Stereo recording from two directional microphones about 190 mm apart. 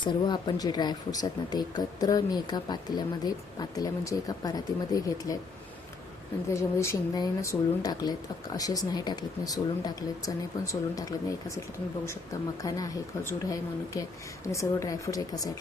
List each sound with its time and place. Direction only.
0.0 s speech: 25° left (ahead or behind)
6.5 s a woman's voice: 15° left (ahead or behind)